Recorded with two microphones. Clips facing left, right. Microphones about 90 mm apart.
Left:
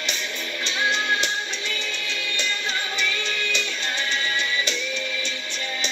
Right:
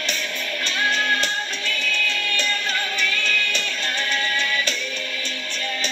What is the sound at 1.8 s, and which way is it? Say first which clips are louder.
Music: right 5 dB; 55° right (ahead or behind).